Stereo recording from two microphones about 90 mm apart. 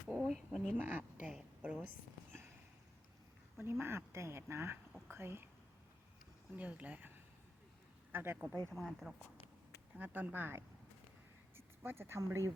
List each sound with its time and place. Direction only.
0.1 s speech: 5° left (ahead or behind)
0.8 s a woman's voice: 20° right (ahead or behind)
3.6 s speech: 30° right (ahead or behind)
6.6 s speech: 15° right (ahead or behind)
8.1 s speech: 25° right (ahead or behind)
8.7 s speech: 5° right (ahead or behind)
10.0 s speech: 20° right (ahead or behind)